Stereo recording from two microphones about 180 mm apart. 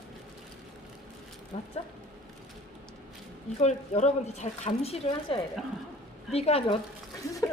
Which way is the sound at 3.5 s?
40° left (ahead or behind).